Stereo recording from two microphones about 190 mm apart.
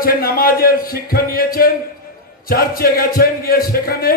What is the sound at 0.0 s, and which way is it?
A man's voice, 50° left (ahead or behind).